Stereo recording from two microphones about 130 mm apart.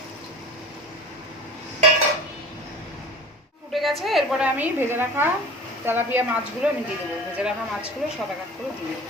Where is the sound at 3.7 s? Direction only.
Centre (ahead or behind).